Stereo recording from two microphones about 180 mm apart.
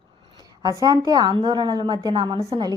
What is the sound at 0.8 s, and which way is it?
A woman's voice, 20° right (ahead or behind).